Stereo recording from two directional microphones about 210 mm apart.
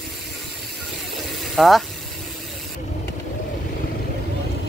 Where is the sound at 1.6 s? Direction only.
Centre (ahead or behind).